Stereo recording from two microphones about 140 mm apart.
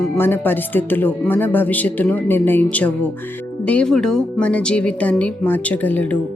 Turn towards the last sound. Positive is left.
turn(degrees=10)  # may be behind; listen again after turning